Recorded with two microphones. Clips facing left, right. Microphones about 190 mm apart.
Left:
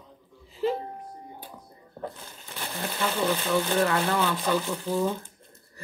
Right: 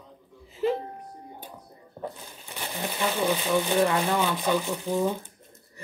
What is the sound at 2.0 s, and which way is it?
Speech, 15° right (ahead or behind).